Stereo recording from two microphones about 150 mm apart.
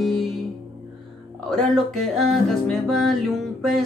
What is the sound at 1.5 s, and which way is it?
Speech, centre (ahead or behind).